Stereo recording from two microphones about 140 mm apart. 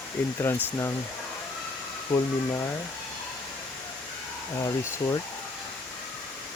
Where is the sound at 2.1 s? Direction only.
25° left (ahead or behind).